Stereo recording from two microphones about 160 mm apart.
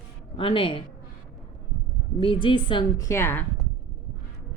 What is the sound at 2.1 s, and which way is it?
A woman's voice, 30° left (ahead or behind).